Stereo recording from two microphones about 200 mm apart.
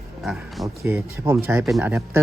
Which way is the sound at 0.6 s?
15° right (ahead or behind).